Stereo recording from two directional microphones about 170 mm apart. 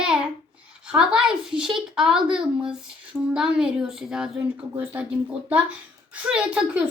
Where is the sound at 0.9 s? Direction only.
5° right (ahead or behind).